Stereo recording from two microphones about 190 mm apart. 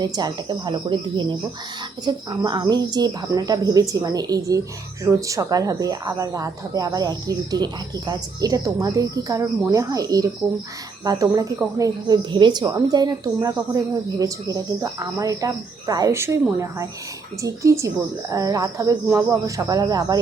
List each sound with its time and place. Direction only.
0.0 s speech: 20° right (ahead or behind)